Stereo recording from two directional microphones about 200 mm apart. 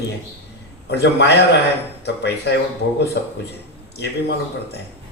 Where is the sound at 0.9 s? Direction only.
55° left (ahead or behind).